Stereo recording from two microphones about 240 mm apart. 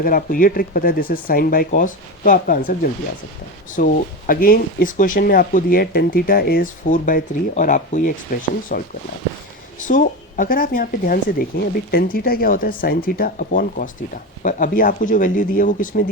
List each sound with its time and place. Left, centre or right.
0.0 s speech: left
3.8 s speech: left